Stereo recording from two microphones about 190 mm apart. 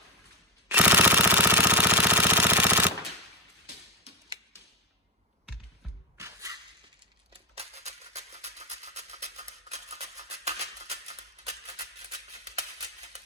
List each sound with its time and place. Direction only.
0.7 s jackhammer: 5° right (ahead or behind)
6.1 s music: 15° right (ahead or behind)
7.5 s music: 35° right (ahead or behind)